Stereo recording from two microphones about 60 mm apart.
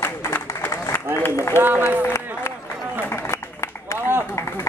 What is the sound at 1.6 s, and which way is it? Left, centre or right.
Speech, right.